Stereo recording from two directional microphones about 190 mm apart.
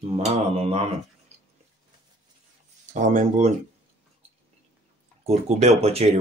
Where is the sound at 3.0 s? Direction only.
40° right (ahead or behind).